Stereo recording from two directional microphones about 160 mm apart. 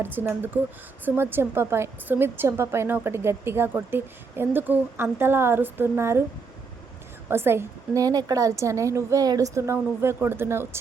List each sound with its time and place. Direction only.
0.0 s a woman's voice: 15° right (ahead or behind)
7.3 s a woman's voice: 15° right (ahead or behind)